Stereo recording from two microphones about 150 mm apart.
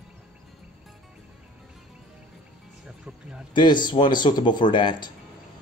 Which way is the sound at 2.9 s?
5° right (ahead or behind).